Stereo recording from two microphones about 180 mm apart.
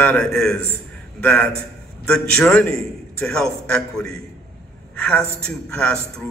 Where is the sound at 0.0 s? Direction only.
10° left (ahead or behind).